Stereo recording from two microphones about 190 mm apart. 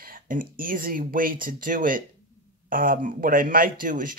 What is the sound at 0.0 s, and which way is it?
Speech, 45° right (ahead or behind).